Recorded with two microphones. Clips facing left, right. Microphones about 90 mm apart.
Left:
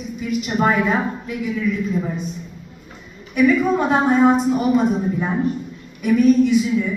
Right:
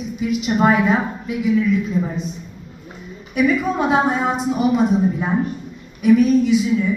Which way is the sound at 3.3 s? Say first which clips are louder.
Left 2 dB; 5° right (ahead or behind).